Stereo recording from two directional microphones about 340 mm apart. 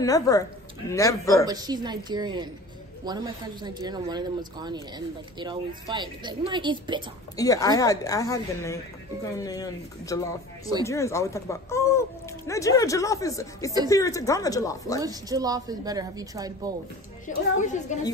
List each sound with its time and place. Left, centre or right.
0.0 s speech: centre
1.4 s a woman's voice: centre
7.3 s speech: centre
15.0 s a woman's voice: centre
17.3 s a woman's voice: left